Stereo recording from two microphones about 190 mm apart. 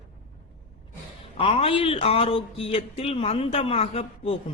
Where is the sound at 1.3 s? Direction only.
30° left (ahead or behind).